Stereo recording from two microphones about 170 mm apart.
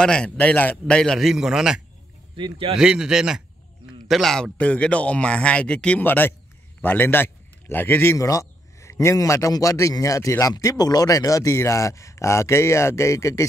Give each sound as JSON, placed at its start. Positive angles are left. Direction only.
{"t": 0.0, "sound": "a man's voice", "side_deg": 5}
{"t": 2.3, "sound": "speech", "side_deg": -30}
{"t": 2.8, "sound": "a man's voice", "side_deg": -5}